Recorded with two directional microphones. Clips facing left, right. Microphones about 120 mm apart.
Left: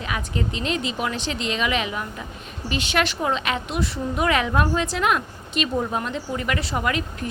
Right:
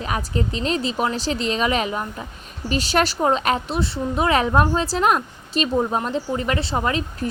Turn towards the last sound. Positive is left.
turn(degrees=-30)  # may be behind; listen again after turning